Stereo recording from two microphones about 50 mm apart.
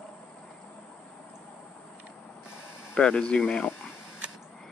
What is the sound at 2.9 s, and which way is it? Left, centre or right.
Speech, left.